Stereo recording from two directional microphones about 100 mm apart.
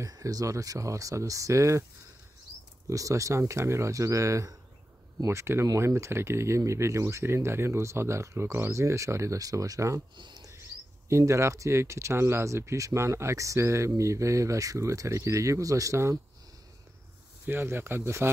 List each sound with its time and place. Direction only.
0.0 s speech: 35° right (ahead or behind)
2.9 s speech: 35° right (ahead or behind)
10.1 s a sound: 50° right (ahead or behind)
11.1 s speech: 30° right (ahead or behind)
17.5 s speech: 20° right (ahead or behind)